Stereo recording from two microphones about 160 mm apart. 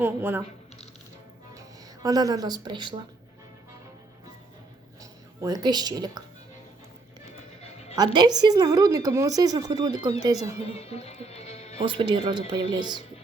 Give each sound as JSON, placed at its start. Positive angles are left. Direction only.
{"t": 0.0, "sound": "speech", "side_deg": -10}
{"t": 1.5, "sound": "speech", "side_deg": -20}
{"t": 5.4, "sound": "a woman's voice", "side_deg": -25}
{"t": 7.9, "sound": "a woman's voice", "side_deg": -25}
{"t": 10.6, "sound": "speech", "side_deg": 40}
{"t": 11.8, "sound": "a woman's voice", "side_deg": -30}